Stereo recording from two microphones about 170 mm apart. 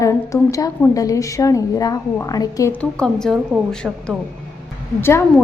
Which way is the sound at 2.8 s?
5° left (ahead or behind).